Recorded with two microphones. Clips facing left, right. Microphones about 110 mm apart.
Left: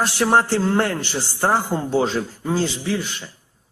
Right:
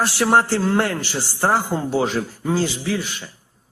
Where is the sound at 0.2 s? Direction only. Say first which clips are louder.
Even; 20° right (ahead or behind).